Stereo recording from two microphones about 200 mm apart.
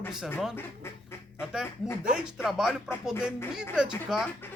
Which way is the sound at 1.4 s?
5° right (ahead or behind).